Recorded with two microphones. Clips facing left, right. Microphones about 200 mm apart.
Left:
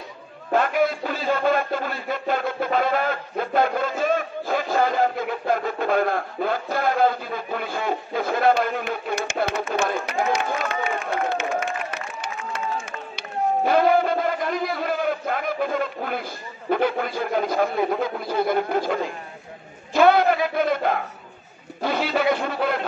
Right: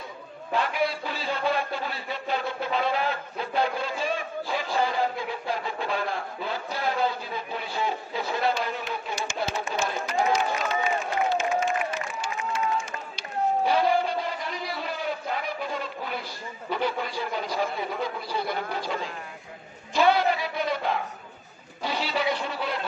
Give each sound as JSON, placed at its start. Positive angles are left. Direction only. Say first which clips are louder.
{"t": 0.5, "sound": "a man's voice", "louder": "left 6 dB", "side_deg": 50}
{"t": 13.7, "sound": "a man's voice", "louder": "left 7 dB", "side_deg": 50}
{"t": 19.9, "sound": "a sound", "louder": "left 5 dB", "side_deg": 50}
{"t": 21.8, "sound": "a man's voice", "louder": "left 6 dB", "side_deg": 55}